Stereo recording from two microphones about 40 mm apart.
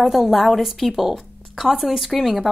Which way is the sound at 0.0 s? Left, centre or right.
Centre.